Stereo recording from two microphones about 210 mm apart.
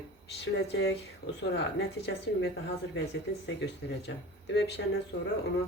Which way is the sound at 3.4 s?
55° left (ahead or behind).